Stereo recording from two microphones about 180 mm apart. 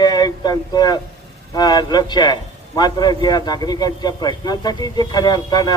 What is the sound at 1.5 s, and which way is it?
A man's voice, 20° left (ahead or behind).